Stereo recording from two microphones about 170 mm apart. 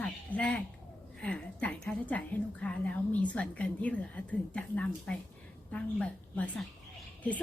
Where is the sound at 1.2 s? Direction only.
5° left (ahead or behind).